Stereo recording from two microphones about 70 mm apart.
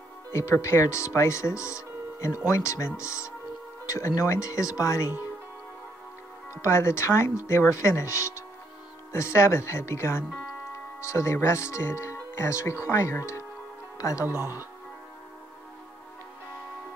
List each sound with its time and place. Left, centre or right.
0.3 s speech: left
6.6 s speech: left
13.9 s speech: left
14.2 s speech: right